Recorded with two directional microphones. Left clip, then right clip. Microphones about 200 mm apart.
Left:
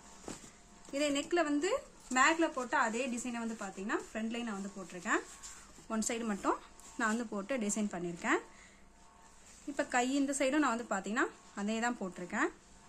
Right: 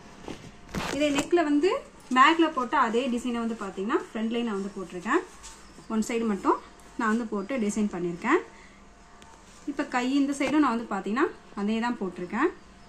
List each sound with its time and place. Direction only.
0.9 s a woman's voice: 30° left (ahead or behind)
2.1 s a woman's voice: 15° left (ahead or behind)
5.9 s a woman's voice: 30° left (ahead or behind)
9.8 s a woman's voice: 35° left (ahead or behind)